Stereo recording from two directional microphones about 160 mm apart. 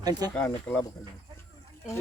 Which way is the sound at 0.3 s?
10° left (ahead or behind).